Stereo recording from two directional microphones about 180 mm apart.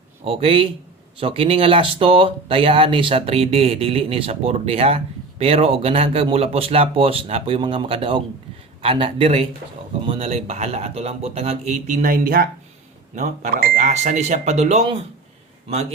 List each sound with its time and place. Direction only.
0.3 s speech: 30° right (ahead or behind)